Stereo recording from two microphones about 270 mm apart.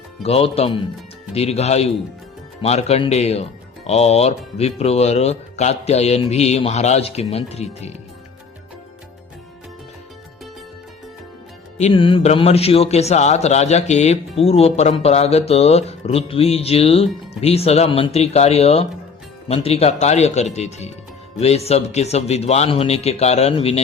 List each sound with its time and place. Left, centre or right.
0.2 s a man's voice: left
11.8 s a man's voice: centre